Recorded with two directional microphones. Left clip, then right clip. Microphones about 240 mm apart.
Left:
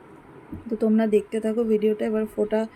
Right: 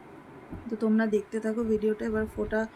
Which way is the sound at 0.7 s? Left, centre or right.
Centre.